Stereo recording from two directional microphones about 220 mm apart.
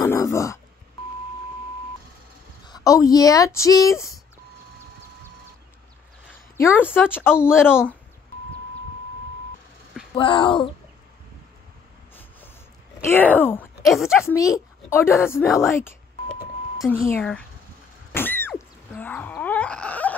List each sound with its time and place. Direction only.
0.0 s a sound: 15° left (ahead or behind)
2.6 s speech: 15° left (ahead or behind)
6.5 s speech: 10° left (ahead or behind)
10.1 s speech: 20° left (ahead or behind)
13.0 s speech: 10° left (ahead or behind)
14.1 s speech: 15° left (ahead or behind)
17.1 s speech: 5° left (ahead or behind)
18.1 s a sound: 10° left (ahead or behind)